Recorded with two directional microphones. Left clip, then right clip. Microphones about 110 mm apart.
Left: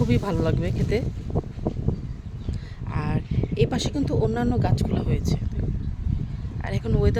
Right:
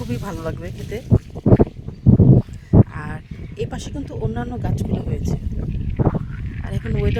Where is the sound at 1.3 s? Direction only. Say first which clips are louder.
Right 4 dB; 5° left (ahead or behind).